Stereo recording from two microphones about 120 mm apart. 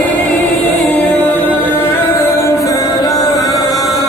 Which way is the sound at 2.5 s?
25° left (ahead or behind).